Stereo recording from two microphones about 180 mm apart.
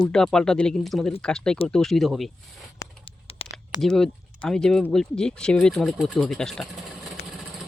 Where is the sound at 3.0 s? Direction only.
30° left (ahead or behind).